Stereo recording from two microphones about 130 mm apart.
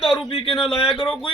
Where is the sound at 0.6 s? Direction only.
45° left (ahead or behind).